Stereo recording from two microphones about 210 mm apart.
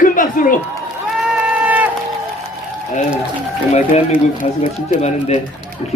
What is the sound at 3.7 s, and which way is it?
Speech, 30° left (ahead or behind).